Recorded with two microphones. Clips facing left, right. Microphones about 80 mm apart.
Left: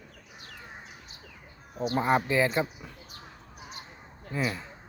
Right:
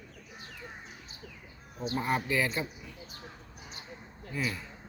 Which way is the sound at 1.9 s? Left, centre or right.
Left.